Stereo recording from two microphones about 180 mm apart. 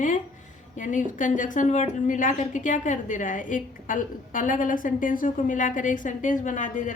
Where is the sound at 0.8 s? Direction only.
45° left (ahead or behind).